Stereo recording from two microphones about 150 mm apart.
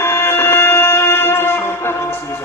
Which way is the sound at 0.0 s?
15° left (ahead or behind).